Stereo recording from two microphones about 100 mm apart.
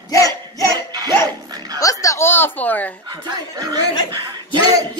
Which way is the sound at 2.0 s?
25° left (ahead or behind).